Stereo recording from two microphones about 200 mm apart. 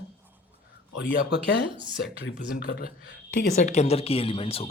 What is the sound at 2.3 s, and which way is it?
Speech, 50° left (ahead or behind).